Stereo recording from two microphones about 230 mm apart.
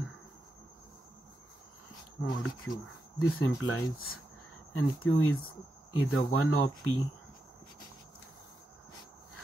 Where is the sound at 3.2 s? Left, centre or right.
Left.